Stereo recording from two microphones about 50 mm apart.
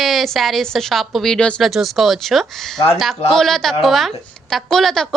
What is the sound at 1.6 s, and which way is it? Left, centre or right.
A woman's voice, centre.